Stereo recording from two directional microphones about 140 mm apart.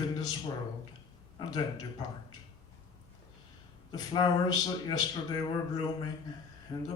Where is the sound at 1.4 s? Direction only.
30° left (ahead or behind).